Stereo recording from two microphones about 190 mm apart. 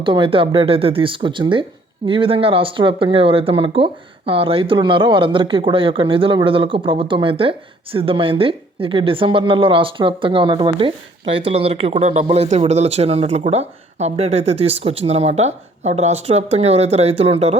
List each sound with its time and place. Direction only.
0.0 s speech: 25° right (ahead or behind)